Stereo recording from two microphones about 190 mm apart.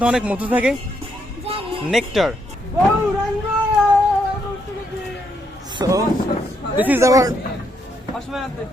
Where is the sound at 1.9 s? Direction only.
Centre (ahead or behind).